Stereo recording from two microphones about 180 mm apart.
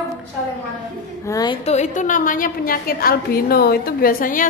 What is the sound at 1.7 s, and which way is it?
A woman's voice, 40° left (ahead or behind).